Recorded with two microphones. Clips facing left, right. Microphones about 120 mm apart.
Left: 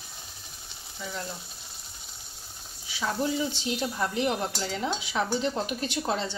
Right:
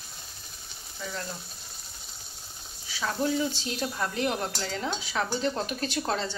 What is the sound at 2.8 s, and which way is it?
Speech, 10° left (ahead or behind).